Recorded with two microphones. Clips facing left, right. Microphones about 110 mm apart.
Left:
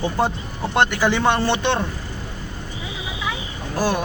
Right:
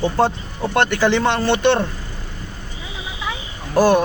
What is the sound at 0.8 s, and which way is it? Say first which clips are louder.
Speech: right 2 dB; 15° left (ahead or behind).